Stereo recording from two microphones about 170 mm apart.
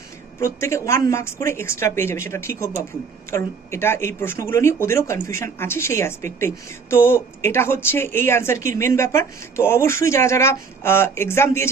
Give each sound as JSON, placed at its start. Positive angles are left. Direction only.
{"t": 0.3, "sound": "speech", "side_deg": 15}